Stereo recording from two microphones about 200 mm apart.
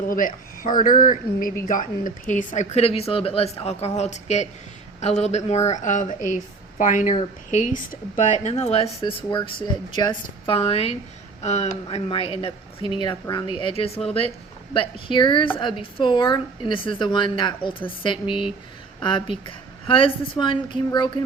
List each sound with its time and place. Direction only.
0.1 s a man's voice: 45° left (ahead or behind); by 21.1 s 25° left (ahead or behind)